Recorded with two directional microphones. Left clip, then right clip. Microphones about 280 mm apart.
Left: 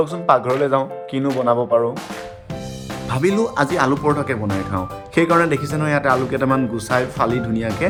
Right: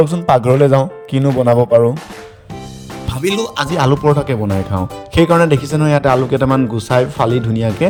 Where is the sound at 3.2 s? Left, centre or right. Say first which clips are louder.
Right 1 dB; right.